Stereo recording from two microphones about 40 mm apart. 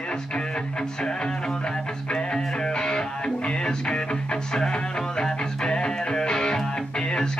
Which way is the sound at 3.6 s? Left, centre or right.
Left.